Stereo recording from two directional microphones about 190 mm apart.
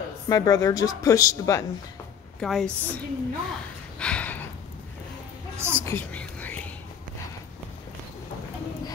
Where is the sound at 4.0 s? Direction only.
5° left (ahead or behind).